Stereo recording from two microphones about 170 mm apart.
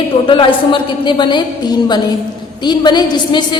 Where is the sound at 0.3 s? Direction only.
30° left (ahead or behind).